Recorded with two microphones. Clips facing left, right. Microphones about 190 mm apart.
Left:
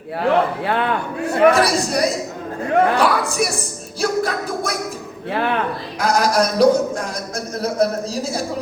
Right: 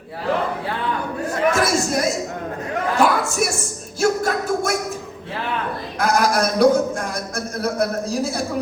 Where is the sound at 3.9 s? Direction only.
45° right (ahead or behind).